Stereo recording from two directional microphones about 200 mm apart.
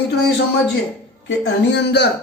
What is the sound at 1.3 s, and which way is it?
Speech, 60° left (ahead or behind).